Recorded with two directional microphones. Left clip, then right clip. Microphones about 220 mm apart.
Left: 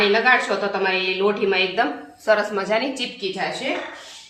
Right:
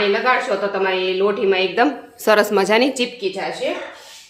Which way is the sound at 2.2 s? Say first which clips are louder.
Right 5 dB; 50° right (ahead or behind).